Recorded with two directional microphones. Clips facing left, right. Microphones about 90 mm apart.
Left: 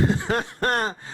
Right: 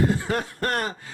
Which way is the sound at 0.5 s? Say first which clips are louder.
Left 2 dB; 25° left (ahead or behind).